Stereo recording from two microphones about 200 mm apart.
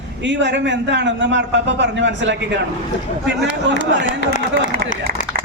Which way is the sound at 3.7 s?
65° right (ahead or behind).